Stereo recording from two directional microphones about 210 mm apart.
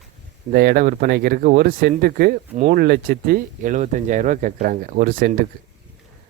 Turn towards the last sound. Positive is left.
turn(degrees=-45)  # may be behind; listen again after turning